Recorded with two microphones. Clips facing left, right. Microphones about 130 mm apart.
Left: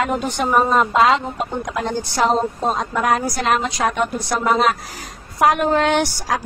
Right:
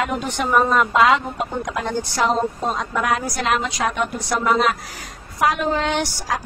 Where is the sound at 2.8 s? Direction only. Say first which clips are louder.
Left 3 dB; 40° left (ahead or behind).